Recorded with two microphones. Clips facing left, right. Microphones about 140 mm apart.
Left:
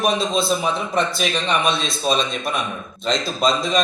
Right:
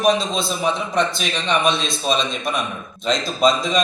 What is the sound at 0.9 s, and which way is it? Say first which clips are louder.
A man's voice: even; 5° left (ahead or behind).